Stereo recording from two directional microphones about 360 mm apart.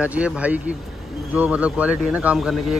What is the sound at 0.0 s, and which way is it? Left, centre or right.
A man's voice, centre.